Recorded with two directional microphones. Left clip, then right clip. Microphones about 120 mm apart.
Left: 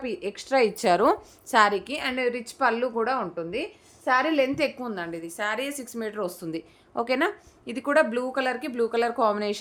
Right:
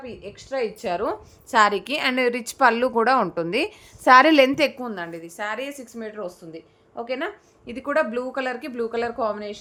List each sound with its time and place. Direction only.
0.0 s a woman's voice: 90° left; by 0.9 s 75° left (ahead or behind)
0.9 s a woman's voice: 45° left (ahead or behind)
1.5 s a woman's voice: 5° right (ahead or behind)
1.7 s a woman's voice: 30° right (ahead or behind); by 4.5 s 70° right (ahead or behind)
4.8 s a woman's voice: 5° right (ahead or behind)
5.4 s a woman's voice: 15° left (ahead or behind); by 6.2 s 35° left (ahead or behind)
6.2 s speech: 65° left (ahead or behind)
7.1 s speech: 35° left (ahead or behind)
7.7 s speech: 15° left (ahead or behind)